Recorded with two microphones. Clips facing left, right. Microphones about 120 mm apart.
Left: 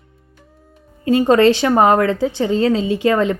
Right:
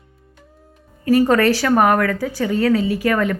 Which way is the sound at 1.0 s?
20° left (ahead or behind).